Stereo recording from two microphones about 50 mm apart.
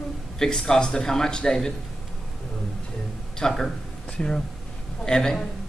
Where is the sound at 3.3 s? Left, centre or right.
Centre.